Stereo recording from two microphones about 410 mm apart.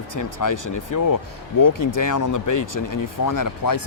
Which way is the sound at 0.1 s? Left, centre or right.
Left.